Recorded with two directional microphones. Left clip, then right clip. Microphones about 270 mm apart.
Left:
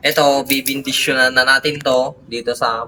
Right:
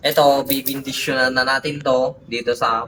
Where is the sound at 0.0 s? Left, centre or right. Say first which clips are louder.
Left 1 dB; centre.